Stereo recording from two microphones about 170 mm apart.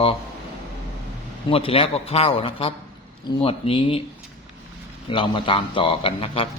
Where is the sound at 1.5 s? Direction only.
35° left (ahead or behind).